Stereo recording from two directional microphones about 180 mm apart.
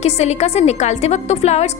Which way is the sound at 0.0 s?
40° left (ahead or behind).